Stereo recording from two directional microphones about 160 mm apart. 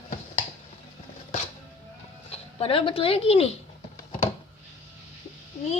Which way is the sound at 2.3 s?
35° left (ahead or behind).